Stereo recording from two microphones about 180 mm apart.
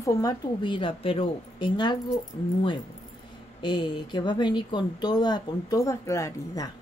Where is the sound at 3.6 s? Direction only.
25° left (ahead or behind).